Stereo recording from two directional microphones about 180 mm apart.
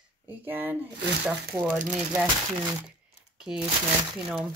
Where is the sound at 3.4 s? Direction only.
5° right (ahead or behind).